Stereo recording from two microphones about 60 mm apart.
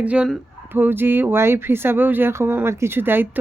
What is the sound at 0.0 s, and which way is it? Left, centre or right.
Speech, right.